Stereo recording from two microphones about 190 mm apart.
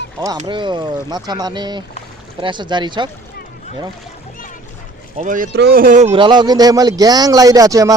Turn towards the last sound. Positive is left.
turn(degrees=-15)  # may be behind; listen again after turning